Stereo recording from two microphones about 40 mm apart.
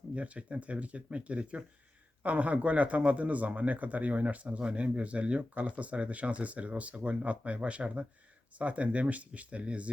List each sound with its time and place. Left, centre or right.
0.2 s speech: right